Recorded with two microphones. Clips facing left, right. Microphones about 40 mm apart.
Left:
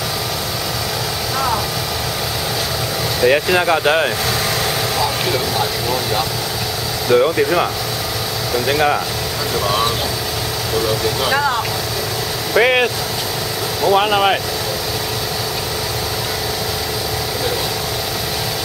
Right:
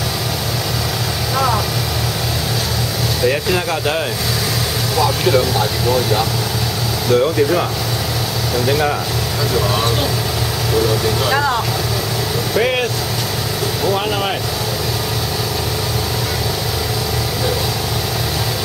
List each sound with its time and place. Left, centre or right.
3.3 s speech: left
5.3 s speech: centre
7.1 s speech: centre
8.6 s speech: centre
9.6 s vehicle: centre
11.2 s speech: centre
12.5 s speech: left